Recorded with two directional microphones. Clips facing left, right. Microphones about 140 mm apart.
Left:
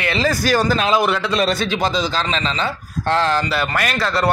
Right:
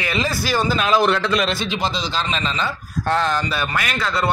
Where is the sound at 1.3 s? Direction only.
40° left (ahead or behind).